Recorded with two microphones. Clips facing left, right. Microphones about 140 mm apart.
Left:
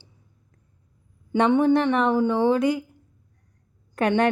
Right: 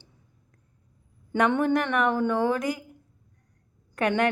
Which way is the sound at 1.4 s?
15° left (ahead or behind).